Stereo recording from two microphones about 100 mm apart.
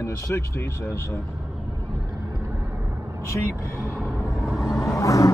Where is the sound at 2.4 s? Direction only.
25° right (ahead or behind).